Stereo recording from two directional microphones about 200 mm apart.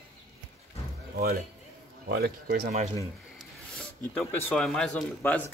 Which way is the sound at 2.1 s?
50° right (ahead or behind).